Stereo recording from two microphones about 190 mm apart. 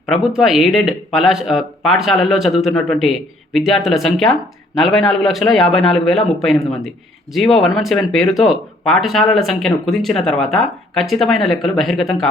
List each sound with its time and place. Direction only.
0.0 s speech: centre (ahead or behind)